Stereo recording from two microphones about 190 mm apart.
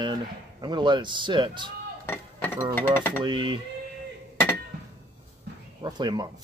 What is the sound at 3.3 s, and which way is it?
Speech, 25° right (ahead or behind).